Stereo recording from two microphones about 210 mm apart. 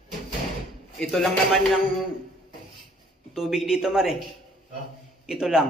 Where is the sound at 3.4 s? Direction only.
Centre (ahead or behind).